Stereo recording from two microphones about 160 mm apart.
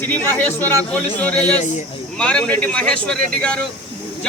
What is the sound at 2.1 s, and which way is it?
A man's voice, 5° left (ahead or behind).